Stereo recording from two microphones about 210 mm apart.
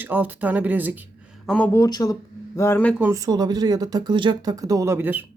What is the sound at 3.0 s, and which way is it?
Speech, 15° right (ahead or behind).